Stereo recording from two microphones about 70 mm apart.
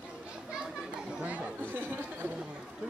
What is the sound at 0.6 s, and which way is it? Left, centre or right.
Children playing, centre.